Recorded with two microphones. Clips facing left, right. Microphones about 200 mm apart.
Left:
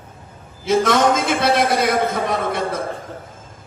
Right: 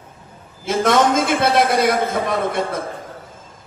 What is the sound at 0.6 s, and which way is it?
A man's voice, 50° right (ahead or behind).